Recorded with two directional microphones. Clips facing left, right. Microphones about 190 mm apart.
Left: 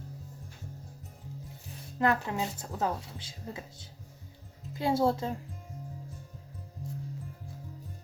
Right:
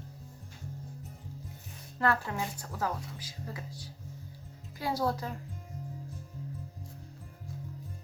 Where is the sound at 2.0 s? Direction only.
20° left (ahead or behind).